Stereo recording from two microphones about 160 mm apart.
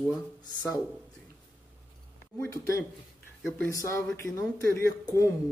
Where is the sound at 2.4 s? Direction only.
20° left (ahead or behind).